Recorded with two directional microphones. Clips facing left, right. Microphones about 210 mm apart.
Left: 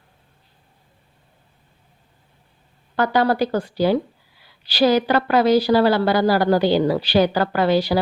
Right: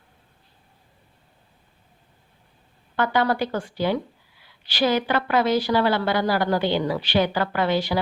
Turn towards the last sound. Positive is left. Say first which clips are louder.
# left 5 dB
turn(degrees=35)  # may be behind; listen again after turning